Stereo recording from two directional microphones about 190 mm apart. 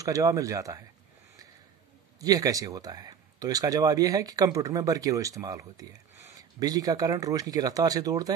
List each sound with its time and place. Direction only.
0.0 s speech: 20° right (ahead or behind)
2.1 s speech: 20° right (ahead or behind)